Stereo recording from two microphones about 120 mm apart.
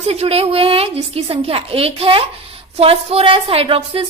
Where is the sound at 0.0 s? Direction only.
60° right (ahead or behind).